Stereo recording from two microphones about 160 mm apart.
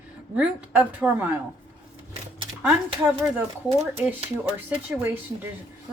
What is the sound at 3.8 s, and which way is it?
Speech, 15° right (ahead or behind).